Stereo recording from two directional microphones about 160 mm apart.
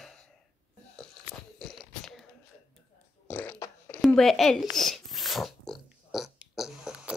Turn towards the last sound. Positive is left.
turn(degrees=-5)  # may be behind; listen again after turning